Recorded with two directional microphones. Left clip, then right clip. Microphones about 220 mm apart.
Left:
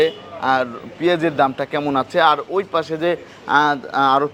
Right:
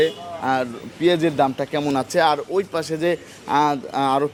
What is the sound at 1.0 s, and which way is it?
Speech, 10° left (ahead or behind).